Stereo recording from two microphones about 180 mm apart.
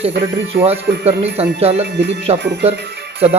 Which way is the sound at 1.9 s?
75° right (ahead or behind).